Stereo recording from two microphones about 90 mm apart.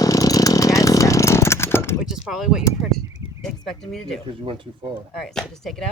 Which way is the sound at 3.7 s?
5° left (ahead or behind).